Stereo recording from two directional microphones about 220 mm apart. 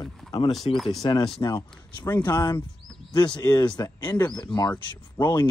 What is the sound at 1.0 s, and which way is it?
Speech, 15° left (ahead or behind).